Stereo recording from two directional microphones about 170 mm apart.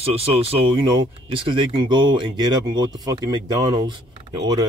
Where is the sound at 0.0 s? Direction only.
35° right (ahead or behind).